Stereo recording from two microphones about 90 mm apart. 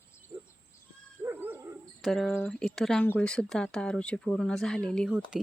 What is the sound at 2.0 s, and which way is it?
Speech, 5° left (ahead or behind).